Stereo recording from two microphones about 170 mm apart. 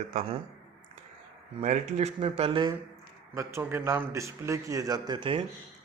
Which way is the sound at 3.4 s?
15° right (ahead or behind).